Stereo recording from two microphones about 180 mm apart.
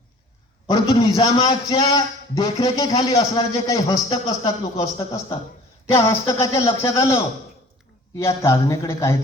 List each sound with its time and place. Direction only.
0.7 s a man's voice: 20° left (ahead or behind)